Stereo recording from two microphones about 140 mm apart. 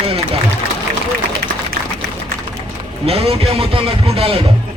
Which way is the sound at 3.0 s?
45° right (ahead or behind).